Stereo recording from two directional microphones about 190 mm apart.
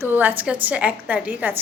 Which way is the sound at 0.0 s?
10° right (ahead or behind).